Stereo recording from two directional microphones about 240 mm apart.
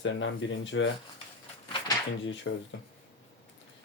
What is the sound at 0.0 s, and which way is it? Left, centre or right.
Speech, left.